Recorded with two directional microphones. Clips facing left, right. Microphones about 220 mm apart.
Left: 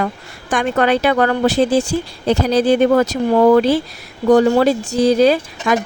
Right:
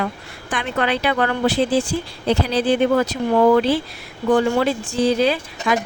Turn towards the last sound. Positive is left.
turn(degrees=40)  # may be behind; listen again after turning